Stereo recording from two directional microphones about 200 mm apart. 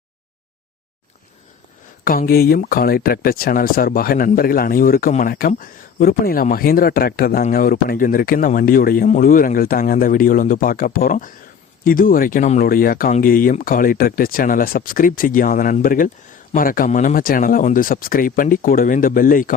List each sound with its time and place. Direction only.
2.0 s speech: 45° left (ahead or behind)